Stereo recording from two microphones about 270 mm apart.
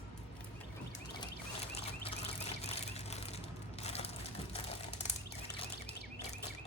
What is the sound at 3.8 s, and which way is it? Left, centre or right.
Crumpling, left.